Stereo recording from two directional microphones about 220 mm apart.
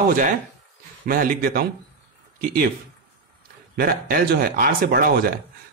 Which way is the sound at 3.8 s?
40° right (ahead or behind).